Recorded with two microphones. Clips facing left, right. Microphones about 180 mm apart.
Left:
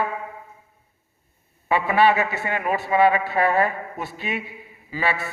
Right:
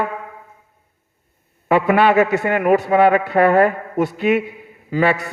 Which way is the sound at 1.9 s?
55° right (ahead or behind).